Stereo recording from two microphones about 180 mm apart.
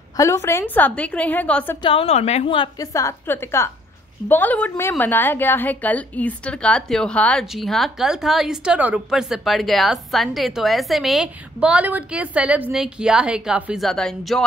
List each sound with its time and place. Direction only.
0.2 s a woman's voice: 15° left (ahead or behind)
1.8 s a woman's voice: 30° left (ahead or behind); by 14.4 s centre (ahead or behind)